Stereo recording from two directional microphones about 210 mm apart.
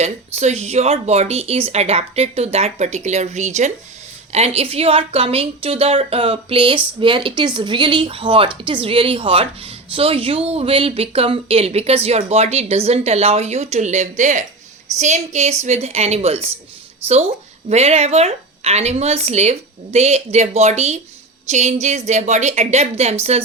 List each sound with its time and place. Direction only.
0.0 s a woman's voice: 30° right (ahead or behind)
17.7 s speech: 30° right (ahead or behind)